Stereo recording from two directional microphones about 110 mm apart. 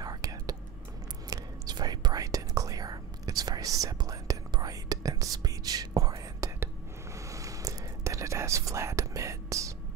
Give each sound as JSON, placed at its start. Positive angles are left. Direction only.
{"t": 0.0, "sound": "whispering", "side_deg": -35}